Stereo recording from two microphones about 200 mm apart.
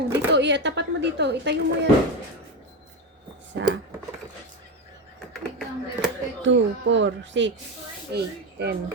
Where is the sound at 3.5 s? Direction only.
60° right (ahead or behind).